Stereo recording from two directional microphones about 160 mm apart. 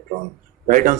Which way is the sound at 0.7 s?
55° right (ahead or behind).